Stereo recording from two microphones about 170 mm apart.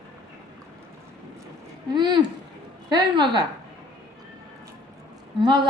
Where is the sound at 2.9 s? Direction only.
25° right (ahead or behind).